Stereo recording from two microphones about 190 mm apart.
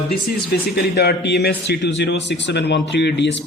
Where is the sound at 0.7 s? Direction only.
60° left (ahead or behind).